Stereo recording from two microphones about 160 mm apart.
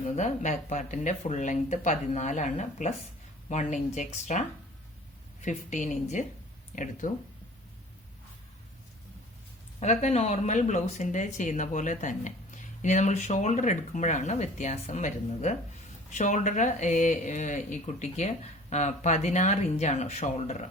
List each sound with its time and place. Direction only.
0.2 s speech: 50° left (ahead or behind)
9.8 s speech: 45° left (ahead or behind)